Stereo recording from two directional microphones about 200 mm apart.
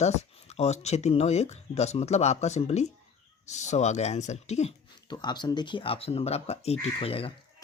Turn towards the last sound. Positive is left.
turn(degrees=30)  # may be behind; listen again after turning